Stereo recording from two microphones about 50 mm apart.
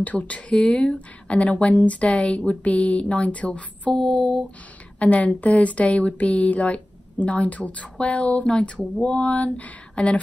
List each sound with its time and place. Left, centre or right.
0.0 s speech: left
0.5 s speech: centre